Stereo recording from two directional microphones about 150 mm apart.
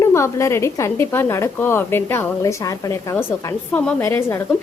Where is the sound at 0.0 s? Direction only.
20° left (ahead or behind).